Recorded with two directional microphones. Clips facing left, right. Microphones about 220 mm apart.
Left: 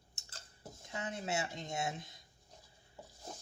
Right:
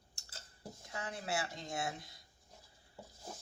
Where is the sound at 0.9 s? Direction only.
20° left (ahead or behind).